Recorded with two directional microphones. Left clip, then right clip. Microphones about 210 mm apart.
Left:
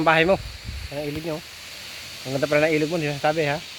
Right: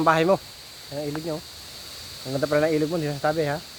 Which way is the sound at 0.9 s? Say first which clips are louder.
Left 1 dB; 20° left (ahead or behind).